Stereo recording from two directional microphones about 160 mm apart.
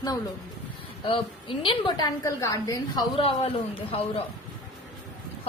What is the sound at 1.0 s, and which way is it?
A woman's voice, 35° left (ahead or behind).